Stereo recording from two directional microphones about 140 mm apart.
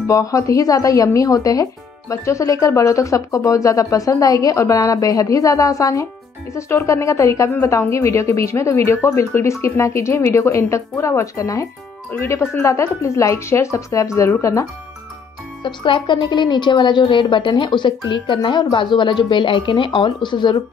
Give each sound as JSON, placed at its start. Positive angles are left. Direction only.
{"t": 0.0, "sound": "speech", "side_deg": 25}
{"t": 15.6, "sound": "a woman's voice", "side_deg": 35}